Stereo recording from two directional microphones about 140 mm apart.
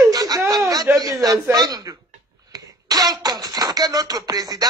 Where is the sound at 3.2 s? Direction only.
25° right (ahead or behind).